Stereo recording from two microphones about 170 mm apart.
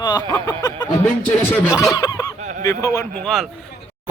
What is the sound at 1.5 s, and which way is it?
Fowl, 15° left (ahead or behind).